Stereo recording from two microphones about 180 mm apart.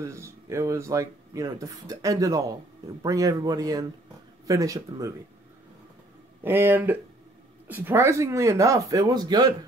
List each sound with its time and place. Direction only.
0.0 s a man's voice: 15° right (ahead or behind)
6.4 s speech: 10° right (ahead or behind)